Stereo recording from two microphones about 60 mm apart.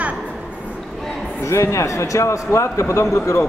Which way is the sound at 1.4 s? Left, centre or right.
Left.